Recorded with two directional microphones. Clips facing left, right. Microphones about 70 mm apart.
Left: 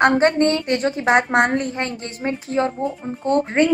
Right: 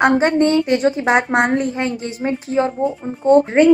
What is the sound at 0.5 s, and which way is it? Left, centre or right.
A woman's voice, left.